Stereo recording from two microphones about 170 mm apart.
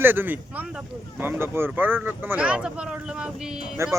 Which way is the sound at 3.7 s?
15° right (ahead or behind).